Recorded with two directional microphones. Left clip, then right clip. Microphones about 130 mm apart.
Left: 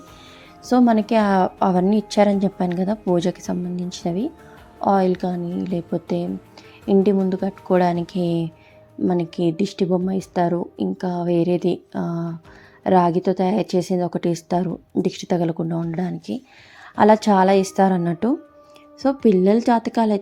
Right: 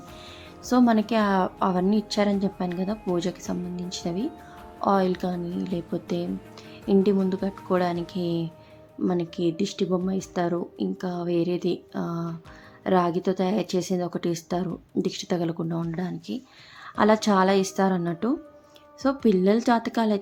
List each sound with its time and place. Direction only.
0.7 s a woman's voice: 25° left (ahead or behind)
18.9 s speech: 20° left (ahead or behind)